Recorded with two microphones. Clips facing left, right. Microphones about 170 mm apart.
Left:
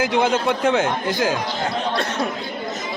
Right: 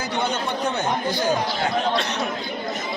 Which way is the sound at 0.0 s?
90° left.